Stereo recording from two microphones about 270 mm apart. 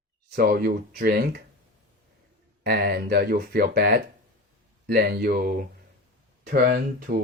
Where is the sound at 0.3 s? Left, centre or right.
Right.